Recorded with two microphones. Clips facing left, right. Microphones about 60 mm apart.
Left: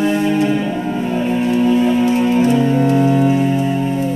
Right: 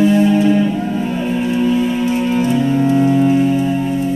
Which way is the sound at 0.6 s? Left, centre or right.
Centre.